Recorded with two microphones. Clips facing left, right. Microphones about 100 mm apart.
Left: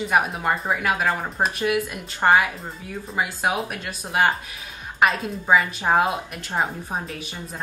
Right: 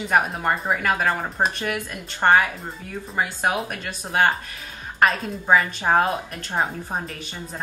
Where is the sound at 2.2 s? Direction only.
5° left (ahead or behind).